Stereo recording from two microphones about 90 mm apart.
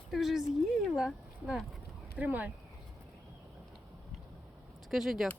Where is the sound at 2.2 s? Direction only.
20° right (ahead or behind).